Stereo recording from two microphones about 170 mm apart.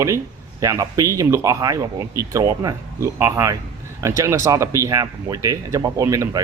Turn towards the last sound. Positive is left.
turn(degrees=-20)  # may be behind; listen again after turning